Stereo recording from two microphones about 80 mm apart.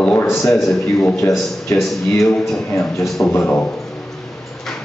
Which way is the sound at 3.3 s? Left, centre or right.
Left.